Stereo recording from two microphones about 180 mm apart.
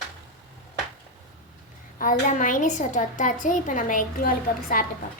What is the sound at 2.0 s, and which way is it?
A woman's voice, 45° left (ahead or behind).